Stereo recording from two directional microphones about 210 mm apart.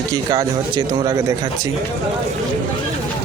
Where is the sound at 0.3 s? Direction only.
20° right (ahead or behind).